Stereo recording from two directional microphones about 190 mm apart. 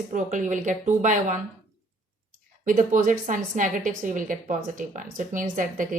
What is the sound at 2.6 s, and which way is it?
A woman's voice, 45° right (ahead or behind).